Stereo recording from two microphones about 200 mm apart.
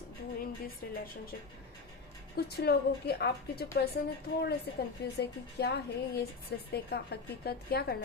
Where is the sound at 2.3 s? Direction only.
55° left (ahead or behind).